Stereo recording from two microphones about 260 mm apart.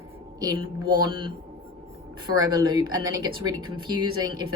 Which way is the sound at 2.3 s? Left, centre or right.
Centre.